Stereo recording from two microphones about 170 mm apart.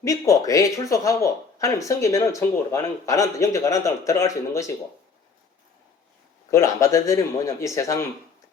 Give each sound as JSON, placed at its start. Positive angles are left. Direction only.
{"t": 0.0, "sound": "speech", "side_deg": 20}
{"t": 6.5, "sound": "speech", "side_deg": 15}